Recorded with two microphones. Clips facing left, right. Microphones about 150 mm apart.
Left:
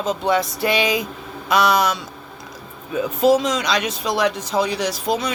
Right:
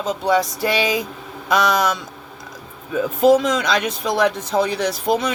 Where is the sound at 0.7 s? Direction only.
20° left (ahead or behind).